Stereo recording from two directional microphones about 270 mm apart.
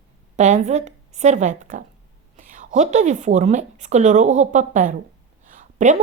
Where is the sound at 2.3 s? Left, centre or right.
Right.